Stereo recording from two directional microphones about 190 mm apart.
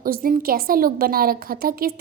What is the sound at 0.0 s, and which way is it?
A woman's voice, 50° right (ahead or behind).